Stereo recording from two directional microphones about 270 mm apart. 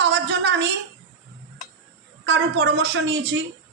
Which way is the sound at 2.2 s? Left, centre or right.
Right.